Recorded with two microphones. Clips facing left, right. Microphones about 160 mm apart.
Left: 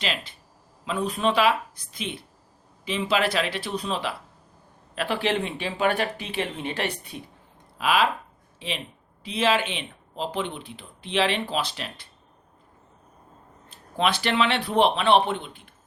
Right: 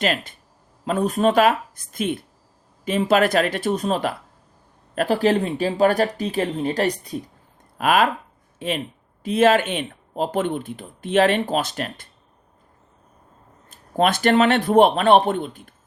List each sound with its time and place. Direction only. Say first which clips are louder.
0.0 s speech: right 8 dB; 50° right (ahead or behind)
7.8 s speech: right 4 dB; 50° right (ahead or behind)
13.7 s speech: right 5 dB; 45° right (ahead or behind)